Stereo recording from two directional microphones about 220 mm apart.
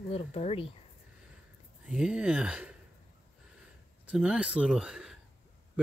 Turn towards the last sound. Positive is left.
turn(degrees=-5)  # may be behind; listen again after turning